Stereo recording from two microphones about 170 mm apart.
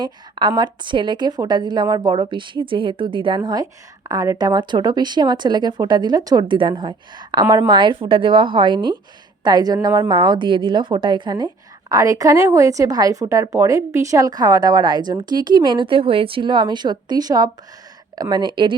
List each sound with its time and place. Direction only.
0.0 s a woman's voice: 25° right (ahead or behind)